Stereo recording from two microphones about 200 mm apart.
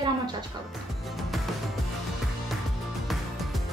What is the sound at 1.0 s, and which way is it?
Music, centre (ahead or behind).